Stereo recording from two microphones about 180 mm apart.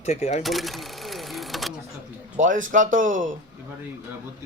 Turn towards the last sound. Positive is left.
turn(degrees=-45)  # may be behind; listen again after turning